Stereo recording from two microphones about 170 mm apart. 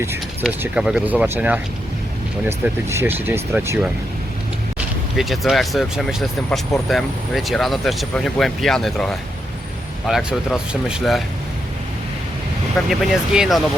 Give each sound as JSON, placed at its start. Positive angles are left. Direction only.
{"t": 0.4, "sound": "speech", "side_deg": -5}
{"t": 5.1, "sound": "speech", "side_deg": 0}
{"t": 12.9, "sound": "speech", "side_deg": -5}